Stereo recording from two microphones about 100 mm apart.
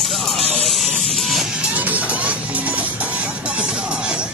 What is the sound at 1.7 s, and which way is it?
Music, 15° right (ahead or behind).